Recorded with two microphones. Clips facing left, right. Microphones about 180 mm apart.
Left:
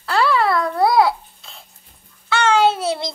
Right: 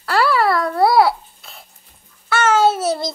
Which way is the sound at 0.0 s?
5° right (ahead or behind).